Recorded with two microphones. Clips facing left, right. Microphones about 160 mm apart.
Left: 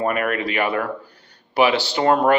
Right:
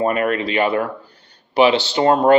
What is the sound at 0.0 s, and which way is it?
Speech, 25° right (ahead or behind).